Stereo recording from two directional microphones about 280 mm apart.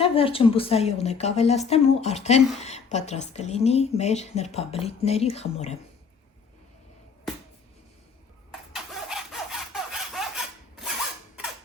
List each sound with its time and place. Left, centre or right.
0.0 s speech: centre
8.7 s sawing: centre